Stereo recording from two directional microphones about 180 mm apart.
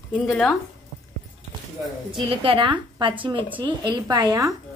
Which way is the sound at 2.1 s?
30° right (ahead or behind).